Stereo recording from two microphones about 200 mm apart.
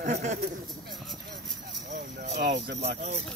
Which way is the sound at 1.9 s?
40° right (ahead or behind).